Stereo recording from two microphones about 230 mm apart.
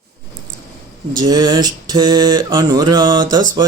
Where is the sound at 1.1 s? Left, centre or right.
Centre.